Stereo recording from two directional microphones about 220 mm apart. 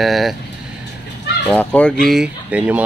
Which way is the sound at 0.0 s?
Centre (ahead or behind).